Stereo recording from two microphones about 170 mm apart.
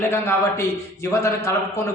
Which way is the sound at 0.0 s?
15° left (ahead or behind).